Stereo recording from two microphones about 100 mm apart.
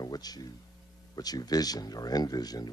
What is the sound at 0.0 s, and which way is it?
Speech, 40° left (ahead or behind).